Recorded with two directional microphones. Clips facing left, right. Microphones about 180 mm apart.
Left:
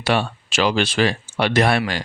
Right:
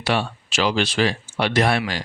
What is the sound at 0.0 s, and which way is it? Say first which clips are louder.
Speech: left 2 dB; 55° left (ahead or behind).